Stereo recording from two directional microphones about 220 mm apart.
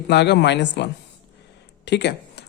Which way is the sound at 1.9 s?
50° left (ahead or behind).